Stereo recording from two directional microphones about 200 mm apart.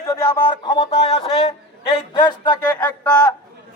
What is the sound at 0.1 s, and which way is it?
Speech, 20° left (ahead or behind).